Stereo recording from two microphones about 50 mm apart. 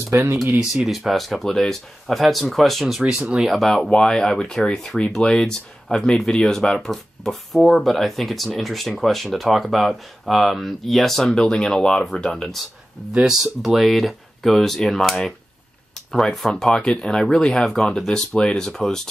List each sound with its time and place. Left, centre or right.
0.1 s speech: right
0.8 s speech: centre
3.1 s speech: centre
3.4 s speech: centre
3.9 s speech: centre
6.9 s speech: centre
13.3 s speech: centre